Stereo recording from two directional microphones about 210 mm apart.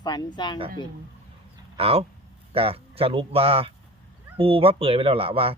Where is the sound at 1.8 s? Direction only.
30° right (ahead or behind).